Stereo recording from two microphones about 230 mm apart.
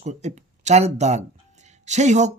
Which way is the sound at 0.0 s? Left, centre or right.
Right.